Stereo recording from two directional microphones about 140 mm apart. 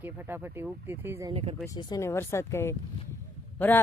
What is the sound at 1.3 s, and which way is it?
Speech, 45° right (ahead or behind).